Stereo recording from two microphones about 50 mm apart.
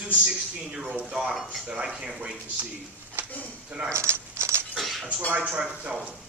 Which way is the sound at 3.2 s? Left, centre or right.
Right.